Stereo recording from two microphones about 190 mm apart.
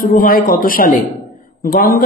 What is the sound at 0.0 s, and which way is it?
Speech, 50° left (ahead or behind).